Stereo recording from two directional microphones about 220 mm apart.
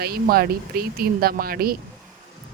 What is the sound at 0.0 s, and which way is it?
A woman's voice, 45° right (ahead or behind).